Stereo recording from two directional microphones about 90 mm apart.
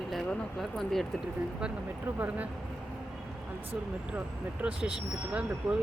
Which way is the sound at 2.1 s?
15° right (ahead or behind).